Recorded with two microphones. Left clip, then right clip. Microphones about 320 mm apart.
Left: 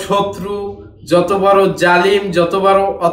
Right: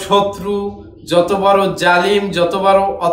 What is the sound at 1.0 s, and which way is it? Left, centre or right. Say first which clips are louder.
A man's voice: left 1 dB; centre.